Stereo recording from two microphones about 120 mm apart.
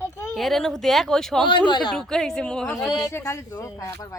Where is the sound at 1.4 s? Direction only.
40° left (ahead or behind).